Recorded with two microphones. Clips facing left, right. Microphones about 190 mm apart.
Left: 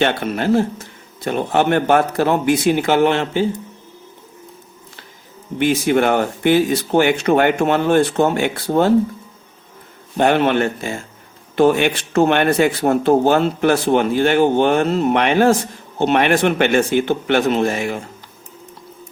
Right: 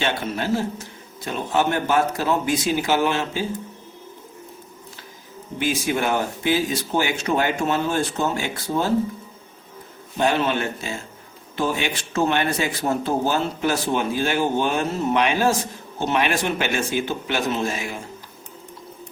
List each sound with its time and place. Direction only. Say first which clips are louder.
0.0 s speech: left 6 dB; 60° left (ahead or behind)
5.5 s speech: left 8 dB; 60° left (ahead or behind)
10.2 s speech: left 6 dB; 60° left (ahead or behind)